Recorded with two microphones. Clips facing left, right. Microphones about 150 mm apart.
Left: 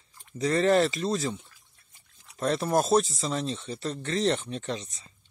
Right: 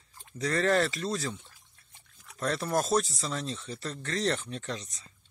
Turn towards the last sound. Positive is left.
turn(degrees=25)  # may be behind; listen again after turning